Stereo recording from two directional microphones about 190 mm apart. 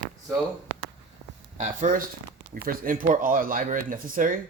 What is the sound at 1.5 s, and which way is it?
Speech, 40° right (ahead or behind).